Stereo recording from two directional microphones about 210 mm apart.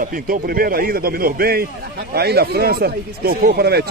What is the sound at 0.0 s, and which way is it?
A man's voice, 40° right (ahead or behind).